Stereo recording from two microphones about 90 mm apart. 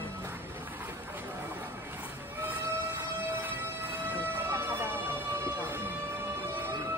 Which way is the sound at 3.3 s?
20° right (ahead or behind).